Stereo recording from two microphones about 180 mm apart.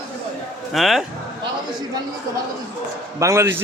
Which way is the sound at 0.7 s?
Centre (ahead or behind).